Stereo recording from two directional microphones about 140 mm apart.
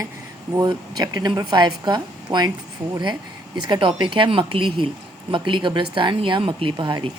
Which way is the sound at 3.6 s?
35° right (ahead or behind).